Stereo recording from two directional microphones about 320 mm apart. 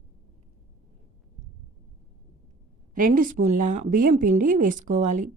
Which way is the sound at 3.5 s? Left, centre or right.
Right.